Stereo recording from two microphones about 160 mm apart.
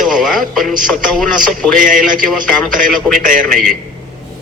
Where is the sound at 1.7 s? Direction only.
55° right (ahead or behind).